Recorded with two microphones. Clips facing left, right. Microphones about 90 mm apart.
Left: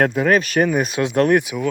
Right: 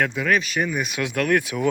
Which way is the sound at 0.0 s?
45° left (ahead or behind).